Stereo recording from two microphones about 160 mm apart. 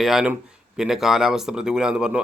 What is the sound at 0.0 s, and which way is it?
Speech, centre (ahead or behind).